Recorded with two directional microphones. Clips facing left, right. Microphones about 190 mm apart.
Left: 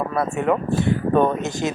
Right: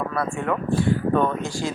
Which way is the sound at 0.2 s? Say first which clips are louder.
Left 6 dB; 20° left (ahead or behind).